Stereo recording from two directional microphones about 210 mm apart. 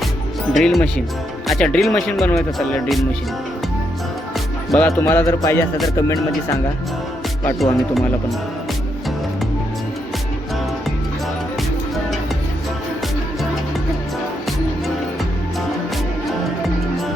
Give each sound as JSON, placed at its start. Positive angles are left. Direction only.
{"t": 0.5, "sound": "speech", "side_deg": 0}
{"t": 4.9, "sound": "speech", "side_deg": 10}
{"t": 7.4, "sound": "speech", "side_deg": 5}